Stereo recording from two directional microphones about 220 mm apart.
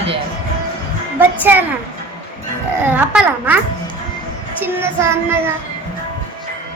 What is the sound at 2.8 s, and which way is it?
Child singing, 5° right (ahead or behind).